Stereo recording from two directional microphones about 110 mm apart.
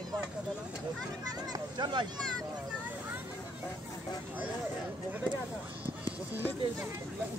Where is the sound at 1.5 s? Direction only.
45° right (ahead or behind).